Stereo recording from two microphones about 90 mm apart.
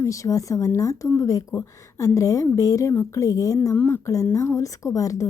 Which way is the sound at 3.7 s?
20° left (ahead or behind).